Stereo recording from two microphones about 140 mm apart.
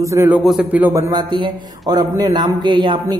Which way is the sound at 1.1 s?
30° right (ahead or behind).